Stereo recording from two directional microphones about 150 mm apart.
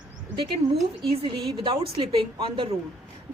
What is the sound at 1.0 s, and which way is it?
Speech, 35° right (ahead or behind).